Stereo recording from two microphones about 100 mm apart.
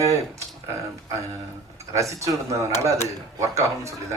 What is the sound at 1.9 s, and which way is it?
Speech, 30° right (ahead or behind).